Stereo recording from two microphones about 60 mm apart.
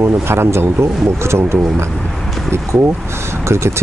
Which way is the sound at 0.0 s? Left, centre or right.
Right.